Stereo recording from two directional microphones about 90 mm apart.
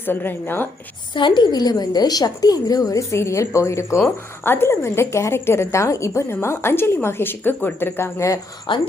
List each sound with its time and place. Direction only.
0.0 s a woman's voice: 25° left (ahead or behind)
1.1 s a woman's voice: 60° left (ahead or behind)
3.1 s a woman's voice: 30° left (ahead or behind)
8.6 s speech: 65° left (ahead or behind)